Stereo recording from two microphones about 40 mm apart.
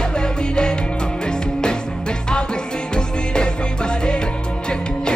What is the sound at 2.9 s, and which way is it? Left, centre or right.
Music, left.